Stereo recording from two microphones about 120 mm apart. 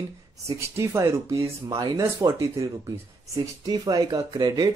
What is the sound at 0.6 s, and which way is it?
Speech, 20° right (ahead or behind).